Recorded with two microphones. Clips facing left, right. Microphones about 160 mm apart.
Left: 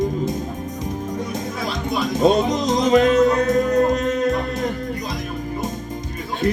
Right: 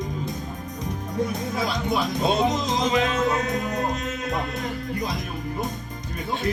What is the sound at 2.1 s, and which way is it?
Music, 45° left (ahead or behind).